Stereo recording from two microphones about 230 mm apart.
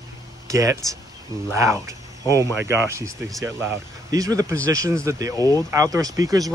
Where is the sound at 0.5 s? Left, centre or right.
Centre.